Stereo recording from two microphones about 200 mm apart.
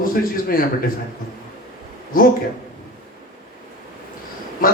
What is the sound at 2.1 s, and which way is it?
Speech, 45° left (ahead or behind).